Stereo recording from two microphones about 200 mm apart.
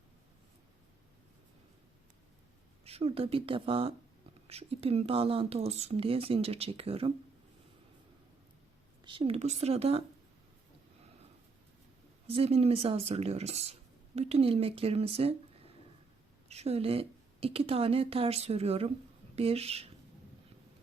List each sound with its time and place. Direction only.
2.8 s speech: 30° right (ahead or behind)
9.0 s a woman's voice: 25° right (ahead or behind)
12.3 s a woman's voice: 30° right (ahead or behind)
16.5 s a woman's voice: 30° right (ahead or behind)